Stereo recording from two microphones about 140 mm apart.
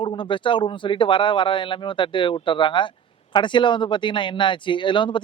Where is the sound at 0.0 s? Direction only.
35° left (ahead or behind).